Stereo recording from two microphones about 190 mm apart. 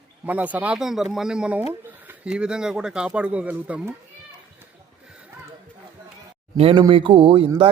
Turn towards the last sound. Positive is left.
turn(degrees=-30)  # may be behind; listen again after turning